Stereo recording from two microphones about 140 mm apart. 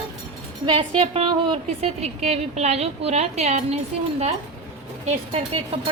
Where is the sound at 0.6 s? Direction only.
35° right (ahead or behind); by 3.8 s 50° right (ahead or behind).